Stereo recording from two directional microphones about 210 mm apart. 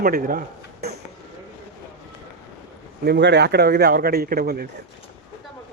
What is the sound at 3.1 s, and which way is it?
Speech, 55° right (ahead or behind).